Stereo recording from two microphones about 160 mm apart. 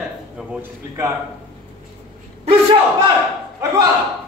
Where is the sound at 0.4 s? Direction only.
10° right (ahead or behind).